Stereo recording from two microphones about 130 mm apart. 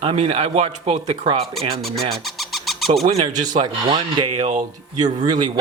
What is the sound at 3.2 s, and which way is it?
Speech, 35° right (ahead or behind).